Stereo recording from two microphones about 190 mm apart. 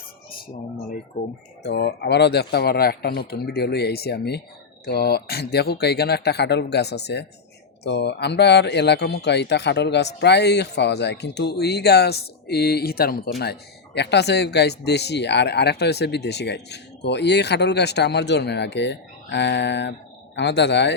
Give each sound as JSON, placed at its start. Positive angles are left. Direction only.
{"t": 1.6, "sound": "speech", "side_deg": 60}